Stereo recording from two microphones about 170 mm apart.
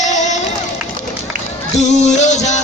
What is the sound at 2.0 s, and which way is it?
Music, 45° left (ahead or behind).